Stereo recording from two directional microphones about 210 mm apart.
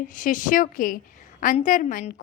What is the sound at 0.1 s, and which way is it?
A woman's voice, 40° left (ahead or behind).